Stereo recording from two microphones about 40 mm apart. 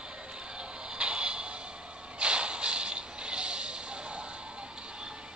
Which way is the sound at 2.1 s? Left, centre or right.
Right.